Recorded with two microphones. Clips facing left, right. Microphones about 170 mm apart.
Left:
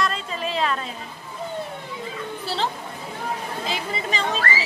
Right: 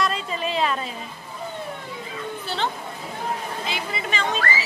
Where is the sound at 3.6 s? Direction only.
35° left (ahead or behind).